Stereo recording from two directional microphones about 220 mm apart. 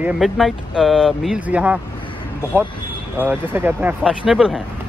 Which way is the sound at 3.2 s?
10° right (ahead or behind).